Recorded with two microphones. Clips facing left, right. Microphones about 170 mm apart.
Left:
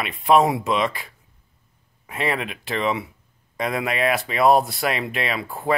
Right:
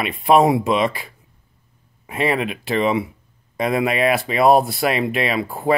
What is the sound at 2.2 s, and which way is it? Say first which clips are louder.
Speech: right 5 dB; 10° right (ahead or behind).